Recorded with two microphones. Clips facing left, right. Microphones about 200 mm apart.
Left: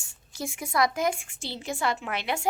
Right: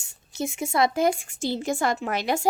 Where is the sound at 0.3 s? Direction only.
20° right (ahead or behind).